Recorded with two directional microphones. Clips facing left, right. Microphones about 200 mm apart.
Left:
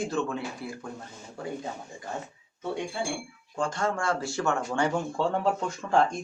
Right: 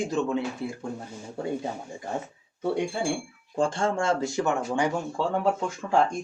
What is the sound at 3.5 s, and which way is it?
Speech, 30° right (ahead or behind).